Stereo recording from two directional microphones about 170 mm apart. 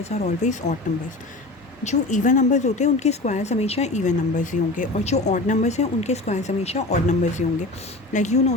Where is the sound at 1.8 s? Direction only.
45° left (ahead or behind).